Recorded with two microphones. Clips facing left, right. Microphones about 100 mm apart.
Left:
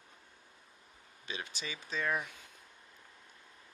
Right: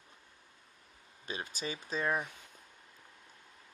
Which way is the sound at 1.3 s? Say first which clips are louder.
Right 3 dB; 40° right (ahead or behind).